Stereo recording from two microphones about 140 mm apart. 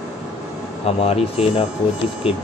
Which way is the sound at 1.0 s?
45° left (ahead or behind).